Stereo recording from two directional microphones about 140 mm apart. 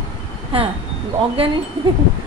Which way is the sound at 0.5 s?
40° right (ahead or behind).